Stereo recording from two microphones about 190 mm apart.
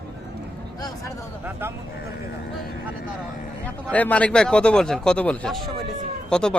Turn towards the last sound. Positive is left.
turn(degrees=5)  # may be behind; listen again after turning